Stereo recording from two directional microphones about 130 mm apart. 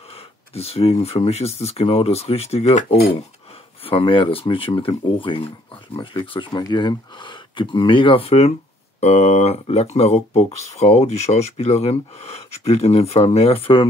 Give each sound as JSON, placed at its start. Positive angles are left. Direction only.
{"t": 0.6, "sound": "speech", "side_deg": 50}
{"t": 3.8, "sound": "speech", "side_deg": 40}